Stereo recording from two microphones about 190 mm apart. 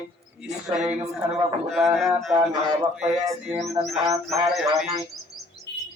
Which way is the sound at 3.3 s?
15° right (ahead or behind).